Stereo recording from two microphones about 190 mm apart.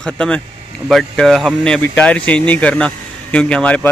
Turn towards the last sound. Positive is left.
turn(degrees=5)  # may be behind; listen again after turning